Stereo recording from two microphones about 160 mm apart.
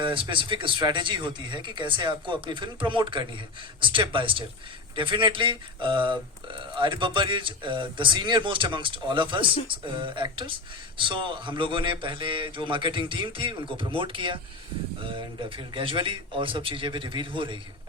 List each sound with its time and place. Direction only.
0.0 s speech: 30° right (ahead or behind)